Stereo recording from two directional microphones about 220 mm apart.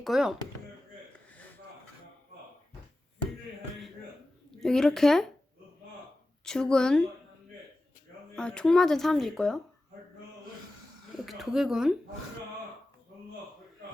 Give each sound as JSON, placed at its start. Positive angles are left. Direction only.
{"t": 0.0, "sound": "speech", "side_deg": 0}
{"t": 4.6, "sound": "speech", "side_deg": 0}
{"t": 6.4, "sound": "speech", "side_deg": 5}
{"t": 8.4, "sound": "speech", "side_deg": 5}
{"t": 11.3, "sound": "speech", "side_deg": 0}